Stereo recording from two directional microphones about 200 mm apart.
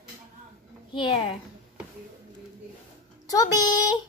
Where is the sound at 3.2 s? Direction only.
20° left (ahead or behind).